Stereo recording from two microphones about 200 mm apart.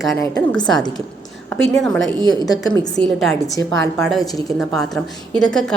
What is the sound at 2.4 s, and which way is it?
Speech, 20° left (ahead or behind).